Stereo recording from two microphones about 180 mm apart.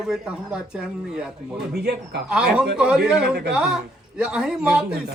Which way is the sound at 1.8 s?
65° right (ahead or behind).